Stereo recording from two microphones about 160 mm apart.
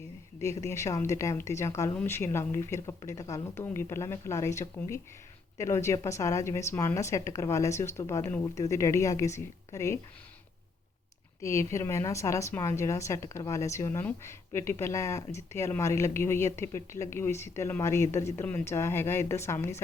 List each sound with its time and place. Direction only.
0.6 s a woman's voice: 20° left (ahead or behind)
11.4 s a woman's voice: 20° left (ahead or behind)